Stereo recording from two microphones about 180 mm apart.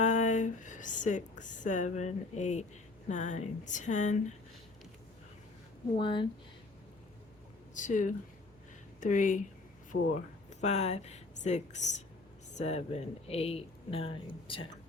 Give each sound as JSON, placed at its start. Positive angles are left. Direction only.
{"t": 0.0, "sound": "a sound", "side_deg": 40}
{"t": 3.1, "sound": "speech", "side_deg": 40}
{"t": 6.0, "sound": "speech", "side_deg": 25}
{"t": 7.7, "sound": "speech", "side_deg": 45}
{"t": 10.6, "sound": "speech", "side_deg": 40}